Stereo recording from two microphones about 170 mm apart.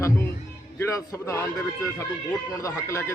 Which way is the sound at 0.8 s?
15° left (ahead or behind).